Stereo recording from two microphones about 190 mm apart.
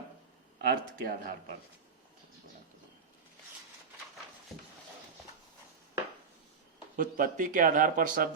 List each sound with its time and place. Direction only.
0.7 s speech: 50° right (ahead or behind)
6.9 s speech: 45° right (ahead or behind)